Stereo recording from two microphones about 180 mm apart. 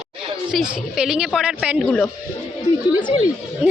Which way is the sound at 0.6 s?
5° right (ahead or behind).